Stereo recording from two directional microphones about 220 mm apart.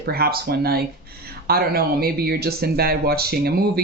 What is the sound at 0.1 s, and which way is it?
Speech, 45° right (ahead or behind).